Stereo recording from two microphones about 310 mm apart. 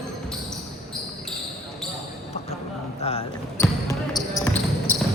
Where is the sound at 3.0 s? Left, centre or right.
Centre.